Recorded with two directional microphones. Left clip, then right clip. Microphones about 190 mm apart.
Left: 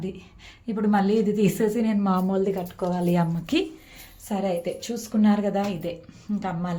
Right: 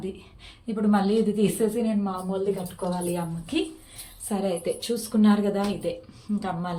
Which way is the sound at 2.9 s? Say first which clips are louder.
Left 6 dB; 40° left (ahead or behind).